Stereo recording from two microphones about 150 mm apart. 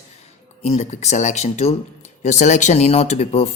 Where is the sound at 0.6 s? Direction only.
50° left (ahead or behind).